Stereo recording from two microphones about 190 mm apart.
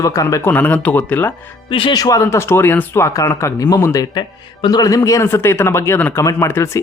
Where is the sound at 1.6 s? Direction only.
25° left (ahead or behind).